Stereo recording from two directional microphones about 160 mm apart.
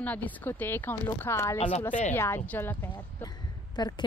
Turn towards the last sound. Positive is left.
turn(degrees=25)  # may be behind; listen again after turning